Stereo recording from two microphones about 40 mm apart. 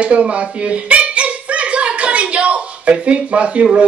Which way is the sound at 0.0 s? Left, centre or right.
Right.